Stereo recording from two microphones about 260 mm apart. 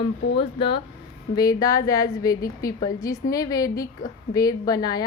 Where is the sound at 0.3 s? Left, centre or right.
Centre.